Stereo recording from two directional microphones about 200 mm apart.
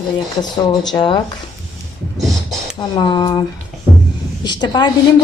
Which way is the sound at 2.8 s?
20° left (ahead or behind).